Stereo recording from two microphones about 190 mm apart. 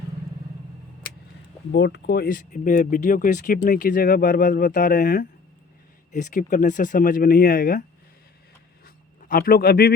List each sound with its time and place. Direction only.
1.7 s speech: 65° left (ahead or behind); by 7.9 s 45° left (ahead or behind)
9.3 s speech: 50° left (ahead or behind)